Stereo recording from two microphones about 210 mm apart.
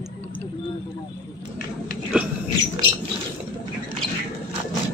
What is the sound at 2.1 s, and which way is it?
Dog, 5° right (ahead or behind).